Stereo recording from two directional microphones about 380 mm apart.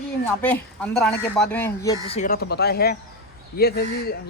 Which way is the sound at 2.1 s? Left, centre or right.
Left.